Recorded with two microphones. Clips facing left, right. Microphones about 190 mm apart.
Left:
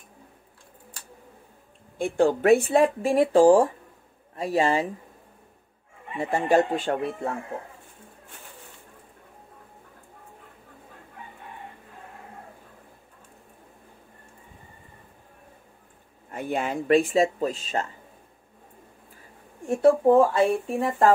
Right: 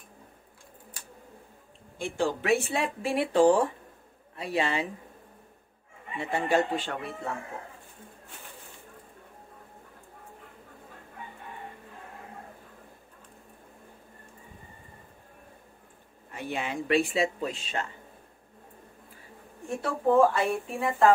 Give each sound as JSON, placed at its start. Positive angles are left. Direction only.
{"t": 2.0, "sound": "speech", "side_deg": 55}
{"t": 6.1, "sound": "speech", "side_deg": 45}
{"t": 16.3, "sound": "speech", "side_deg": 45}
{"t": 19.7, "sound": "speech", "side_deg": 40}